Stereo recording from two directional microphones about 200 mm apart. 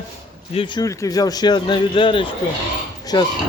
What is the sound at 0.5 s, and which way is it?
Speech, 25° left (ahead or behind).